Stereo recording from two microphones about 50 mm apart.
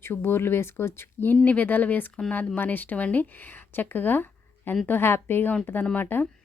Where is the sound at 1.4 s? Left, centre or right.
Left.